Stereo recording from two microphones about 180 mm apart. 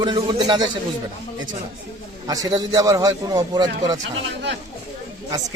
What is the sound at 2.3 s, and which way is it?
A man's voice, 20° right (ahead or behind).